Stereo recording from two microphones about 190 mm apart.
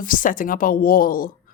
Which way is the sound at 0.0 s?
45° left (ahead or behind).